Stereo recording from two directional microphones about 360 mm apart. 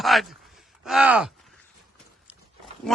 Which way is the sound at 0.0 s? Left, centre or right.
Centre.